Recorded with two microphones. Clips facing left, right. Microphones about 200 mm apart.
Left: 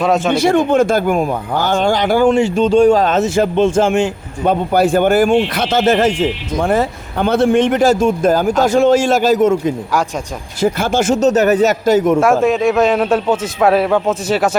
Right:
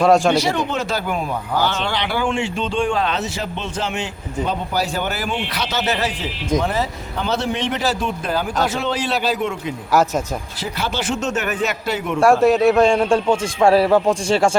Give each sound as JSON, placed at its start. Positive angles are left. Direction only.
{"t": 0.0, "sound": "a man's voice", "side_deg": 0}
{"t": 0.3, "sound": "speech", "side_deg": 50}
{"t": 12.2, "sound": "a man's voice", "side_deg": 0}
{"t": 14.3, "sound": "speech", "side_deg": -25}